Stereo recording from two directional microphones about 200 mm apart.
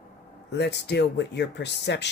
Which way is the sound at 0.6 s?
60° left (ahead or behind).